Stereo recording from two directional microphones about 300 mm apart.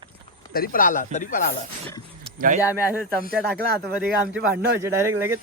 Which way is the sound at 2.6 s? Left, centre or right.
Centre.